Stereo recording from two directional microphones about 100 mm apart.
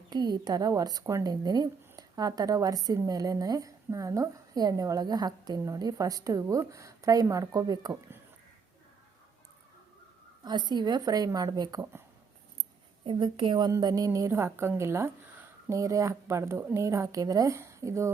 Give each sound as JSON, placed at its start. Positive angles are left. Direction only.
{"t": 0.1, "sound": "a woman's voice", "side_deg": -45}
{"t": 10.4, "sound": "speech", "side_deg": -50}
{"t": 13.1, "sound": "a woman's voice", "side_deg": -55}
{"t": 13.7, "sound": "speech", "side_deg": -35}